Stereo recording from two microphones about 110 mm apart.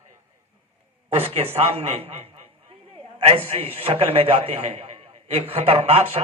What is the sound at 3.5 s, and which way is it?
A man's voice, 60° right (ahead or behind).